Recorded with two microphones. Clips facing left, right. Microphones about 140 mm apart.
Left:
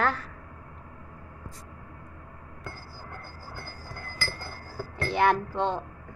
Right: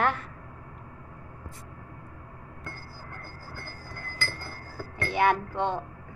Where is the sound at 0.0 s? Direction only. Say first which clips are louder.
Right 1 dB; 20° right (ahead or behind).